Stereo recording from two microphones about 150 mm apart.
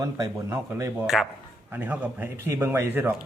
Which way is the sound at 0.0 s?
20° right (ahead or behind).